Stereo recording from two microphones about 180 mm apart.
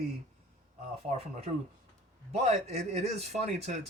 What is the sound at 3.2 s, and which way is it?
Speech, 35° right (ahead or behind).